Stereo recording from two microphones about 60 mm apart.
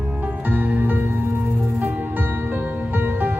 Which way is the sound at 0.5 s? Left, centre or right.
Right.